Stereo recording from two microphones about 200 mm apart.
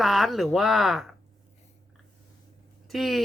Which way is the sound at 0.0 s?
Centre (ahead or behind).